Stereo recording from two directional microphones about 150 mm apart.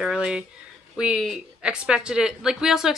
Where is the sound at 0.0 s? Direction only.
5° right (ahead or behind).